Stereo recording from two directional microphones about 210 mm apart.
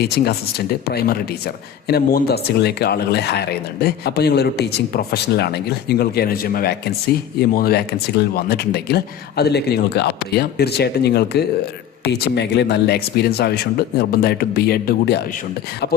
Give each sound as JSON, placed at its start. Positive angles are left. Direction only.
{"t": 0.0, "sound": "speech", "side_deg": 50}